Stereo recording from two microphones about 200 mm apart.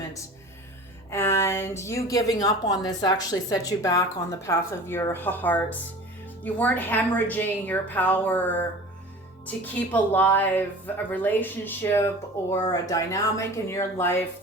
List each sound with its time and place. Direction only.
1.1 s speech: 10° left (ahead or behind)
9.9 s speech: 10° left (ahead or behind)